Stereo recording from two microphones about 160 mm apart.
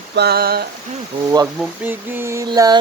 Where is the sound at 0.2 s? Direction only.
75° right (ahead or behind).